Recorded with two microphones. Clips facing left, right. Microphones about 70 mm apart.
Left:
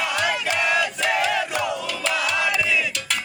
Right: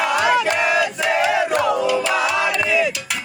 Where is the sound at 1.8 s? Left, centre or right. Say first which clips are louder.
Right 7 dB; centre.